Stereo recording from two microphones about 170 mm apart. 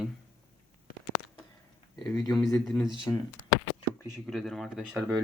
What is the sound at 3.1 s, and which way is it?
Speech, 20° left (ahead or behind).